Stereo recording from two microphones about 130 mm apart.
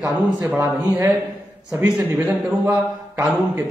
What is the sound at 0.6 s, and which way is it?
A man's voice, 25° right (ahead or behind).